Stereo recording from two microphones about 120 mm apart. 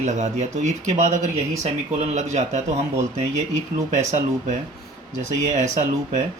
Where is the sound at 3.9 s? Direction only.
90° right.